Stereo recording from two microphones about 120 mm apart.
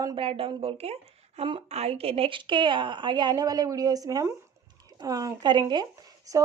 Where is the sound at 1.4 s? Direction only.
45° right (ahead or behind).